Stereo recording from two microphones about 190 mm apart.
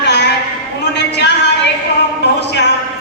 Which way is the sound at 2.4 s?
65° left (ahead or behind).